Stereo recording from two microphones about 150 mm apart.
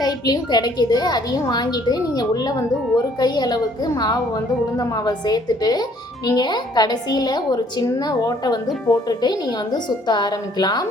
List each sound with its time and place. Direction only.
0.0 s a woman's voice: 25° left (ahead or behind)